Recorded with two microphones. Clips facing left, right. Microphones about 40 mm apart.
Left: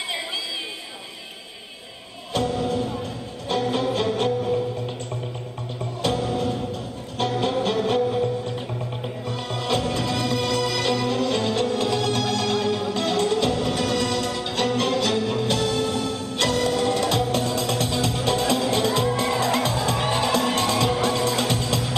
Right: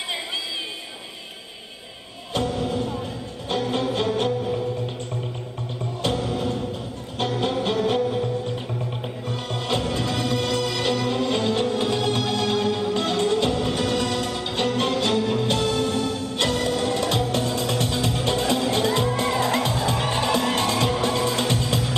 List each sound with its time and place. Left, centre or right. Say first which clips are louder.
2.3 s music: left 1 dB; centre
6.0 s music: left 1 dB; centre
9.3 s music: left 1 dB; centre